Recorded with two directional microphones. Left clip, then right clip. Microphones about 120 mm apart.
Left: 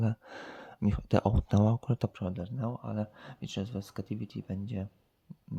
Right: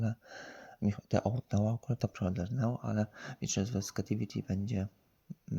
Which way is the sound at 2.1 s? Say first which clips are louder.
Right 1 dB; 5° left (ahead or behind).